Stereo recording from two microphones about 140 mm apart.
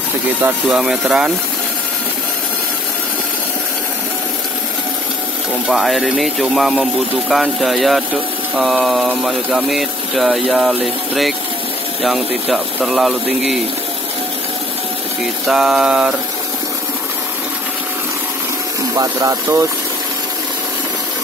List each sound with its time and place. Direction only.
0.7 s speech: 5° right (ahead or behind)
5.7 s speech: centre (ahead or behind)
15.4 s speech: 5° right (ahead or behind)
18.9 s speech: 20° right (ahead or behind)